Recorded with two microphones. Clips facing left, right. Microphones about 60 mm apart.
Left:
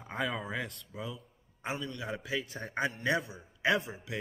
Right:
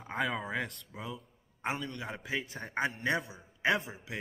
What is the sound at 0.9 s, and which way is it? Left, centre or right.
Speech, right.